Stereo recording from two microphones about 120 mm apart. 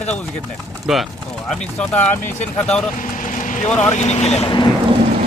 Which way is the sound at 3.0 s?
90° left.